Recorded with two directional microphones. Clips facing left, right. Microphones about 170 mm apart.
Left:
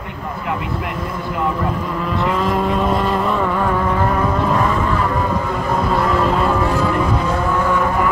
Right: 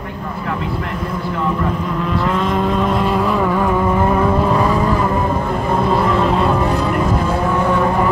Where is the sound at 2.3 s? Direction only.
5° left (ahead or behind).